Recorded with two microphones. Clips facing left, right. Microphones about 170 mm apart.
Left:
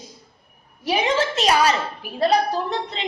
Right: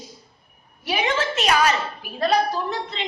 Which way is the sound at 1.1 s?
35° left (ahead or behind).